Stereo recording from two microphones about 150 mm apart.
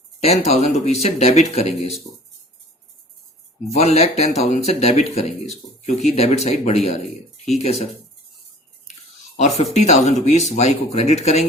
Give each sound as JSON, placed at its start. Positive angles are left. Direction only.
{"t": 0.2, "sound": "speech", "side_deg": 45}
{"t": 3.8, "sound": "speech", "side_deg": 45}
{"t": 9.4, "sound": "speech", "side_deg": 50}